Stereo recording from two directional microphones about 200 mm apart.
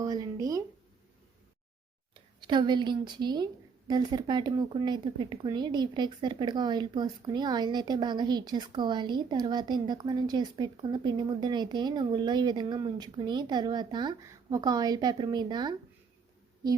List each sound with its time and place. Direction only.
0.0 s speech: 20° right (ahead or behind)
2.5 s a woman's voice: 20° right (ahead or behind)